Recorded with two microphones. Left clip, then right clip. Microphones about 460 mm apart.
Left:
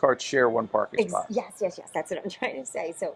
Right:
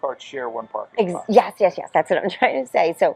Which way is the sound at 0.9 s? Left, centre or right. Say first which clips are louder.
Right 10 dB; right.